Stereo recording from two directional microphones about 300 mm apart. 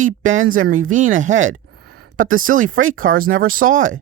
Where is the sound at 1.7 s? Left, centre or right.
Right.